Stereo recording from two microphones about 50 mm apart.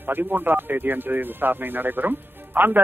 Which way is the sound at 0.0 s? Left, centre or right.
Right.